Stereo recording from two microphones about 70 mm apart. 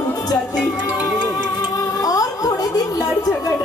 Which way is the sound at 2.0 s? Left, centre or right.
Left.